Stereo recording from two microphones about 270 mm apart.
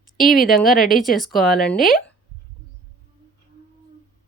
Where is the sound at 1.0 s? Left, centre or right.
Centre.